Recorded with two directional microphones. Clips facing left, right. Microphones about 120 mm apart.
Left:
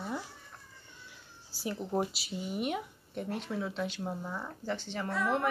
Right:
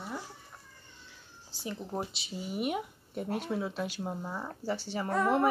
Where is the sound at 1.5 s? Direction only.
10° left (ahead or behind).